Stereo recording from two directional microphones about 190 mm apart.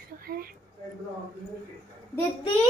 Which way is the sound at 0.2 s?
50° right (ahead or behind).